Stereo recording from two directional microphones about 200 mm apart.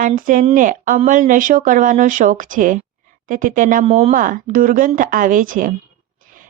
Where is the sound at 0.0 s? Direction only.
40° right (ahead or behind).